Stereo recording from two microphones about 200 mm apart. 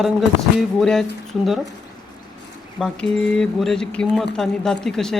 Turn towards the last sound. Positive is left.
turn(degrees=0)  # may be behind; listen again after turning